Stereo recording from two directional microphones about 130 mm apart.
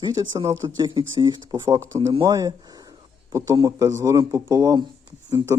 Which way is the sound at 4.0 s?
25° right (ahead or behind).